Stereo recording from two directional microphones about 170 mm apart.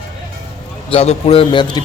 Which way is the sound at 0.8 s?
35° left (ahead or behind).